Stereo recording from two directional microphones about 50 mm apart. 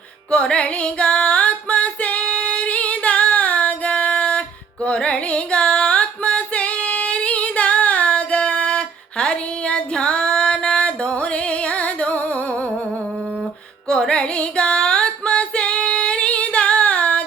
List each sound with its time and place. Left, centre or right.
0.3 s music: centre
13.8 s music: centre